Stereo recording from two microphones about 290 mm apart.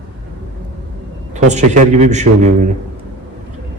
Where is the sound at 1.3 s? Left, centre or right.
Right.